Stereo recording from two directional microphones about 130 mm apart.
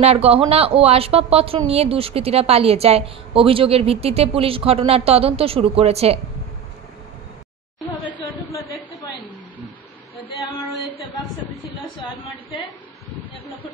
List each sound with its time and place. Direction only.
0.0 s a woman's voice: 50° right (ahead or behind)